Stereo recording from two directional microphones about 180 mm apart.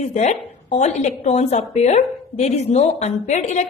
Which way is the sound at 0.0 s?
40° left (ahead or behind).